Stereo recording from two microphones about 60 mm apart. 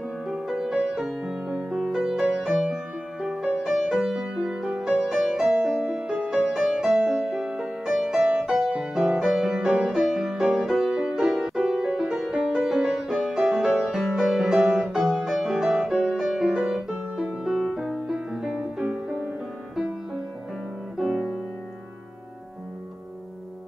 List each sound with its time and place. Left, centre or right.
0.5 s music: centre
6.3 s music: centre
21.0 s music: centre